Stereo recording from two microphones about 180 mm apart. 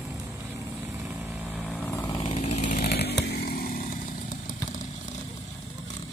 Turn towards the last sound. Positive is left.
turn(degrees=50)  # may be behind; listen again after turning